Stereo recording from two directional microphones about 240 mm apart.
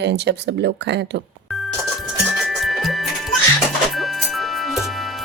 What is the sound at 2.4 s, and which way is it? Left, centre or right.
Music, centre.